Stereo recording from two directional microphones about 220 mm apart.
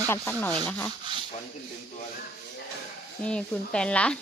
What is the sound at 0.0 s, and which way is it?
Speech, 5° left (ahead or behind).